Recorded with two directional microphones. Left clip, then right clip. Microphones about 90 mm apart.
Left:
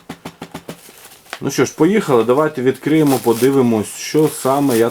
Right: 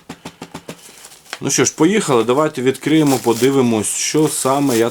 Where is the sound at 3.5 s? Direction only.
25° right (ahead or behind).